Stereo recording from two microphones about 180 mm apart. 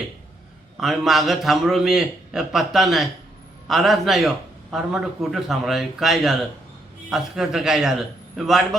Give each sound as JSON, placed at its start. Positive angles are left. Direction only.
{"t": 0.8, "sound": "a man's voice", "side_deg": 0}